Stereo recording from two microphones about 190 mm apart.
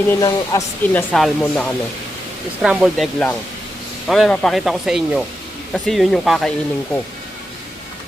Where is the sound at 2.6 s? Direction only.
5° right (ahead or behind).